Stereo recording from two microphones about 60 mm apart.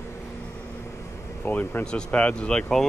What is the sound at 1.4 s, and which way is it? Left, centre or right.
A man's voice, left.